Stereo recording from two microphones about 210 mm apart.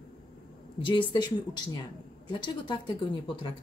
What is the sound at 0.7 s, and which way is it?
Speech, 25° left (ahead or behind).